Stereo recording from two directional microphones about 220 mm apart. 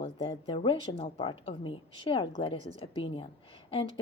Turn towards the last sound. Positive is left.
turn(degrees=25)  # may be behind; listen again after turning